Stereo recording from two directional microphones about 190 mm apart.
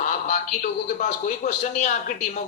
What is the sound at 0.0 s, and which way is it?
A man's voice, 40° left (ahead or behind).